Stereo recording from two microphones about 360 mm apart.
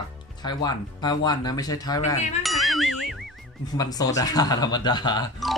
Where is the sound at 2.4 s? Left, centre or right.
Centre.